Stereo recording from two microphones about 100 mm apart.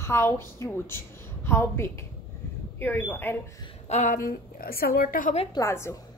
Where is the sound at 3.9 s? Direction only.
90° left.